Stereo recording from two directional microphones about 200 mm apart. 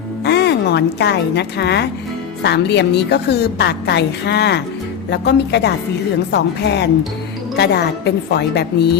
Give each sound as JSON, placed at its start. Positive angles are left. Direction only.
{"t": 0.3, "sound": "a woman's voice", "side_deg": 55}